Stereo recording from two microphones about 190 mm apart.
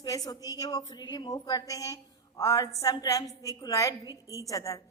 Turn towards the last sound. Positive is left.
turn(degrees=15)  # may be behind; listen again after turning